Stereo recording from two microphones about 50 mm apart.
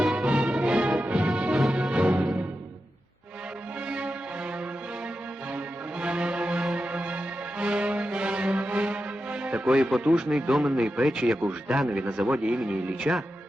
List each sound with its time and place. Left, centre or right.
0.0 s music: centre
3.8 s music: right
5.5 s music: right
10.2 s speech: centre
10.8 s speech: centre
12.3 s speech: right